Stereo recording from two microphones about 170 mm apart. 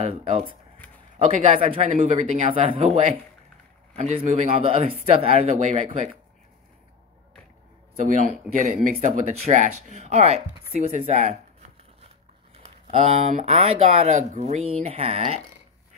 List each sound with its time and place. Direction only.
0.0 s speech: 35° right (ahead or behind)
7.9 s speech: 50° right (ahead or behind)
12.5 s speech: 40° right (ahead or behind)